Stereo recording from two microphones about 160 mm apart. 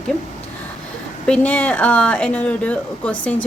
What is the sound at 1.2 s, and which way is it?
Speech, 5° left (ahead or behind).